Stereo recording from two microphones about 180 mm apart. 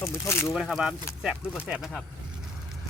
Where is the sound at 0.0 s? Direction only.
15° left (ahead or behind).